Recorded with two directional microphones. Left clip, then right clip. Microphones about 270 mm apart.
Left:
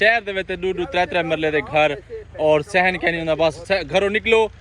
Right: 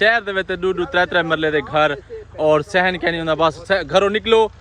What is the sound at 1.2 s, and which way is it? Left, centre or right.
Speech, right.